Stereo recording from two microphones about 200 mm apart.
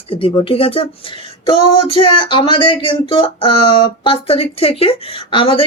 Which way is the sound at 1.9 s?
25° left (ahead or behind).